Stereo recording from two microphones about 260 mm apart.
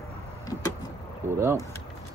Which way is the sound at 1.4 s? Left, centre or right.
Centre.